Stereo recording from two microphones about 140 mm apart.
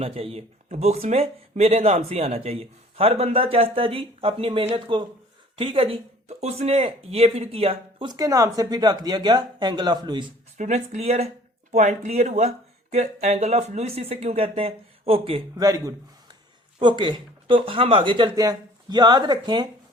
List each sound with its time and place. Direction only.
0.0 s speech: 45° right (ahead or behind)
8.1 s speech: 25° right (ahead or behind)
10.6 s speech: 55° right (ahead or behind)
15.5 s a man's voice: 25° right (ahead or behind)